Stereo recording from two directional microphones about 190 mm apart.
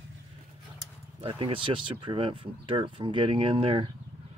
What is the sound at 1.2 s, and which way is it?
Speech, 30° right (ahead or behind).